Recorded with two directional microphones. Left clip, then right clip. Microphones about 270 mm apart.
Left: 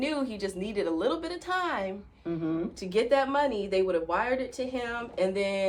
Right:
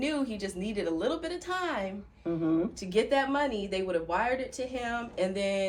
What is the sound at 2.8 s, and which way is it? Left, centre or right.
Speech, centre.